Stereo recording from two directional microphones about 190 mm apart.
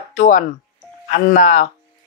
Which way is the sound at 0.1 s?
45° left (ahead or behind).